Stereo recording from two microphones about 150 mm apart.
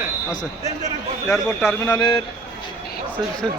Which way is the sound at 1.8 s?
30° left (ahead or behind).